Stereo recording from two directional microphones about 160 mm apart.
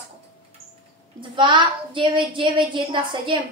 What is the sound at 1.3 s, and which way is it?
A woman's voice, 30° right (ahead or behind).